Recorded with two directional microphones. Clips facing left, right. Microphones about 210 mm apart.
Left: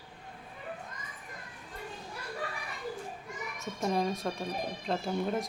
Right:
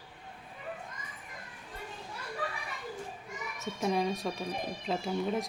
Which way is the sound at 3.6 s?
Centre (ahead or behind).